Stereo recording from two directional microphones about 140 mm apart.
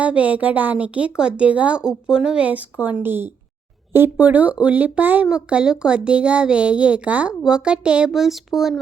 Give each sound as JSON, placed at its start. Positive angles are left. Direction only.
{"t": 0.0, "sound": "speech", "side_deg": -10}